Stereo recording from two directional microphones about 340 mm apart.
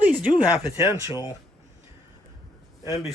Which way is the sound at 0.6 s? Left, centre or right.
Centre.